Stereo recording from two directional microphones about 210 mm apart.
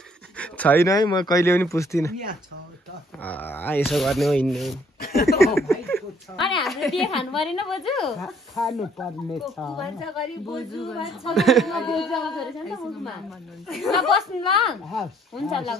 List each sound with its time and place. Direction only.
0.4 s speech: 5° left (ahead or behind)
3.2 s speech: 10° left (ahead or behind)
5.0 s a sound: 50° left (ahead or behind)
5.4 s speech: centre (ahead or behind)